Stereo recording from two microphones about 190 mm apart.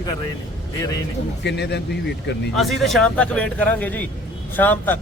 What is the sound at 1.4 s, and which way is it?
Speech, 65° left (ahead or behind).